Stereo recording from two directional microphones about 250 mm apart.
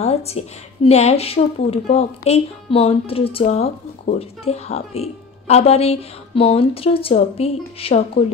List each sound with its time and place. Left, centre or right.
0.0 s a woman's voice: left